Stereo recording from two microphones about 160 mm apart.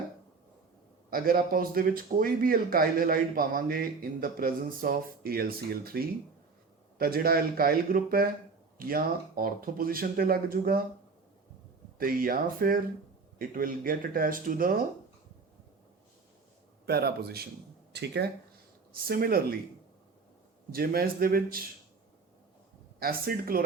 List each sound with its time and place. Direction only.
1.1 s a man's voice: 65° right (ahead or behind)
11.9 s speech: 65° right (ahead or behind)
16.8 s speech: 80° right
17.9 s speech: 90° right
19.0 s a man's voice: 70° right (ahead or behind)
20.7 s a man's voice: 70° right (ahead or behind)
23.0 s a man's voice: 70° right (ahead or behind)